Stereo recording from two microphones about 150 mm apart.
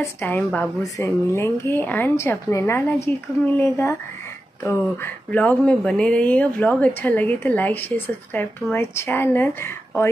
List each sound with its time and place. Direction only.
0.0 s speech: 10° left (ahead or behind)